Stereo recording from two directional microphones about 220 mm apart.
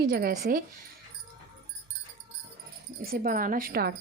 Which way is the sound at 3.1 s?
40° right (ahead or behind).